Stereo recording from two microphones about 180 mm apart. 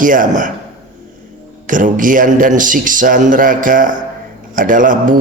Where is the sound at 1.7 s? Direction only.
45° right (ahead or behind).